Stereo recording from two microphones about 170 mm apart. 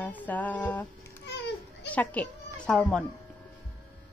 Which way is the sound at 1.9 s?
10° left (ahead or behind).